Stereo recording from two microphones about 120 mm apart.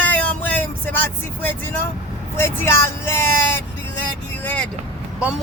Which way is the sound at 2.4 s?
20° left (ahead or behind).